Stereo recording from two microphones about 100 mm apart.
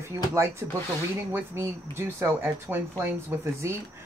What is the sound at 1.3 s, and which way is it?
Speech, 25° right (ahead or behind).